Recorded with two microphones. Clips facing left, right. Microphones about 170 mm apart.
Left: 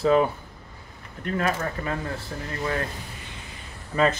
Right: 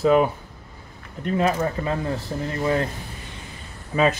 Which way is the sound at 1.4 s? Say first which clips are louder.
Right 5 dB; 20° right (ahead or behind).